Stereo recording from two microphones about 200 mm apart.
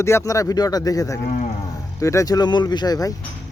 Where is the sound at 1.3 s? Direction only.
40° left (ahead or behind).